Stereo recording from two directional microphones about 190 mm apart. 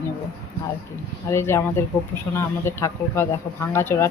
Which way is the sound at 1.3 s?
15° left (ahead or behind).